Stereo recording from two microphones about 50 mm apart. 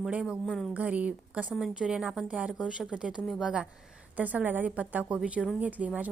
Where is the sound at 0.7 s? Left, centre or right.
Right.